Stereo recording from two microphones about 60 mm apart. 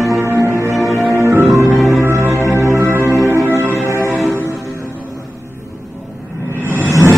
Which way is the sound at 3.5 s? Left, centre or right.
Right.